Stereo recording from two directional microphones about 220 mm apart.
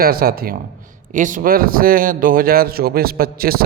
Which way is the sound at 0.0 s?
45° right (ahead or behind).